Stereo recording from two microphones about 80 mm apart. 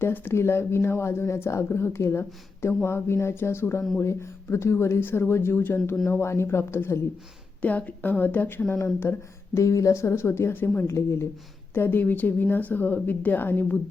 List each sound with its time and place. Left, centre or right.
0.0 s speech: left
7.6 s speech: centre